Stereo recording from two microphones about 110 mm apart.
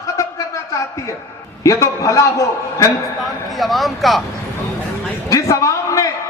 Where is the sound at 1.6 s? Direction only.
30° left (ahead or behind).